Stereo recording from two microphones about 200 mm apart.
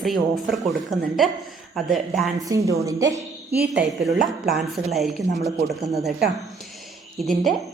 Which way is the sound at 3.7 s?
Centre (ahead or behind).